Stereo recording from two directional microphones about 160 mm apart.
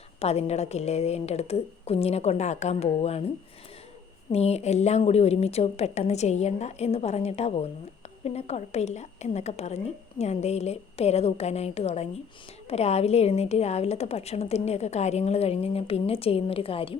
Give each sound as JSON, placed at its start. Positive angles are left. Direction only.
{"t": 0.2, "sound": "a woman's voice", "side_deg": 40}
{"t": 4.3, "sound": "a woman's voice", "side_deg": 40}